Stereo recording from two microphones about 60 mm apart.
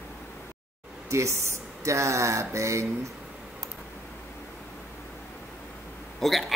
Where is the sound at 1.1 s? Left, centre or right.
Right.